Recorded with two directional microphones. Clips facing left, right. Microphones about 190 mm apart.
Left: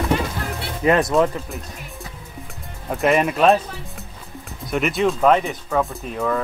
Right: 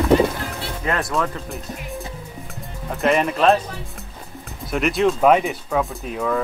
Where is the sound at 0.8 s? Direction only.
20° left (ahead or behind).